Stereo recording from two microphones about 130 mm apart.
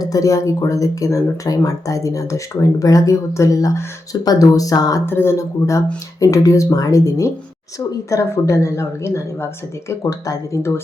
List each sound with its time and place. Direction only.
0.0 s speech: 25° left (ahead or behind)